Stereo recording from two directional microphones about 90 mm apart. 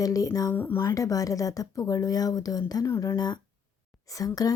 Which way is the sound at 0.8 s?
40° left (ahead or behind).